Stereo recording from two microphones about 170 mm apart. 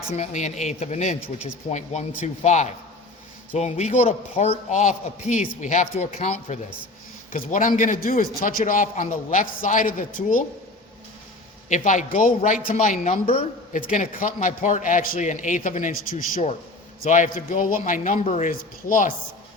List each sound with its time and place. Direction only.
0.1 s a man's voice: 40° left (ahead or behind)
7.3 s a man's voice: 50° left (ahead or behind)
11.7 s a man's voice: 45° left (ahead or behind)